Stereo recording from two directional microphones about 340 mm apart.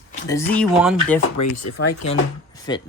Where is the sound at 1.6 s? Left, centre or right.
Left.